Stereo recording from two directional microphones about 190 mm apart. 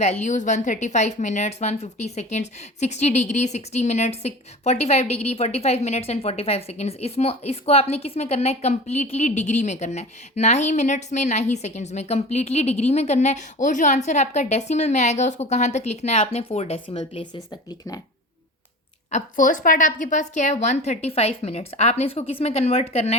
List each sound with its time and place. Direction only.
0.0 s a woman's voice: 35° left (ahead or behind); by 18.0 s 20° left (ahead or behind)
19.1 s a woman's voice: 45° left (ahead or behind)